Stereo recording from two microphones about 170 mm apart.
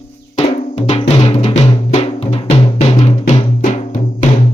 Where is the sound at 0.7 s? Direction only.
40° left (ahead or behind).